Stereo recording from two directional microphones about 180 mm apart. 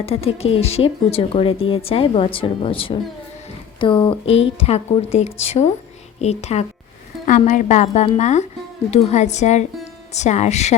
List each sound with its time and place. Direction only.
0.0 s speech: 35° left (ahead or behind)